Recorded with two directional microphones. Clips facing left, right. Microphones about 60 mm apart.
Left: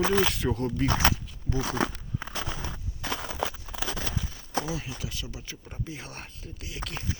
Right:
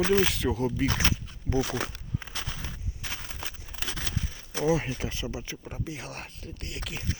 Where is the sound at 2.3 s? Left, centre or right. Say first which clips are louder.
Left 3 dB; left.